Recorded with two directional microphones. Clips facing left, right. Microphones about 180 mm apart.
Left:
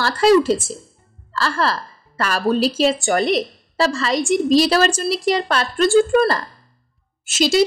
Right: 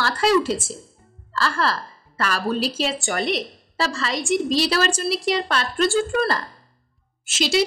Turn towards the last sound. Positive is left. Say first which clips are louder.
# left 5 dB
turn(degrees=40)  # may be behind; listen again after turning